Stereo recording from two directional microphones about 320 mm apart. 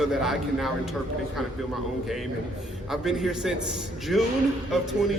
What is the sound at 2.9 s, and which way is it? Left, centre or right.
Speech, centre.